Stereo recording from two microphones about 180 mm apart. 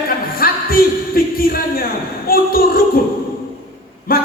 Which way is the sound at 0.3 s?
55° left (ahead or behind).